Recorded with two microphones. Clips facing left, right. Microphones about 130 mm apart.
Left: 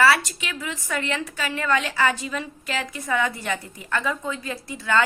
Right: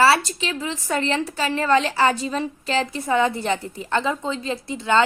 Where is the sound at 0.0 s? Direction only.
30° right (ahead or behind).